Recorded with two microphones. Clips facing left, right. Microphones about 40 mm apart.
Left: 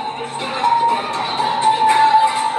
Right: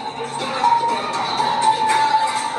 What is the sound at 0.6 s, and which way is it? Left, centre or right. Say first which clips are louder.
Music: left 2 dB; left.